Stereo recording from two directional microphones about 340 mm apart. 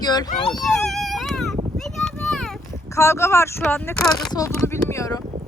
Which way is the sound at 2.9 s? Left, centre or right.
Centre.